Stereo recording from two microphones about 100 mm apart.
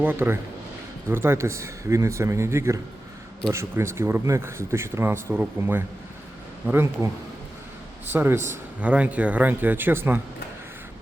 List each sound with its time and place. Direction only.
0.0 s speech: 20° right (ahead or behind)
8.1 s speech: 20° right (ahead or behind)